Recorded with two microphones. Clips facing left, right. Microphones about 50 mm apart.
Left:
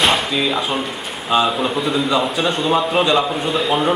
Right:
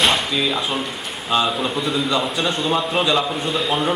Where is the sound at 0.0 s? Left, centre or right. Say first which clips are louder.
Left 2 dB; centre.